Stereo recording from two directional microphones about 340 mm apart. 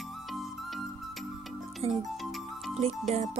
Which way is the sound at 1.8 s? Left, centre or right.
Centre.